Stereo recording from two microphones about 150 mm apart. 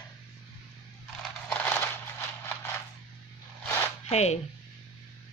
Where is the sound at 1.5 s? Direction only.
10° left (ahead or behind).